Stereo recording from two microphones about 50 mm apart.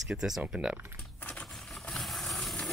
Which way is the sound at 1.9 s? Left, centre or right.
Centre.